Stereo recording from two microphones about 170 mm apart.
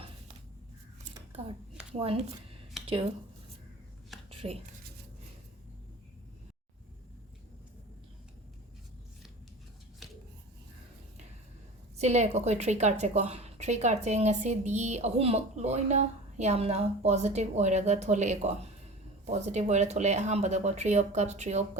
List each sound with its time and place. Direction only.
2.0 s a woman's voice: 35° right (ahead or behind)
4.1 s a sound: centre (ahead or behind)
11.9 s a woman's voice: 40° right (ahead or behind)